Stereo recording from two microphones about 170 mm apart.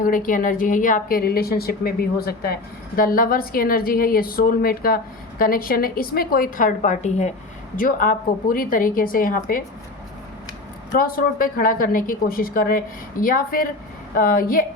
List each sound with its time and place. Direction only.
0.0 s a woman's voice: 55° left (ahead or behind)
7.8 s a woman's voice: 55° left (ahead or behind)
10.9 s a woman's voice: 60° left (ahead or behind)